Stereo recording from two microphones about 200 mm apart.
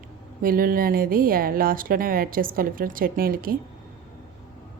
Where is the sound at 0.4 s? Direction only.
45° right (ahead or behind).